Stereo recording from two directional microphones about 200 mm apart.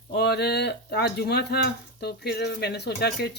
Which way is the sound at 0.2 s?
55° left (ahead or behind).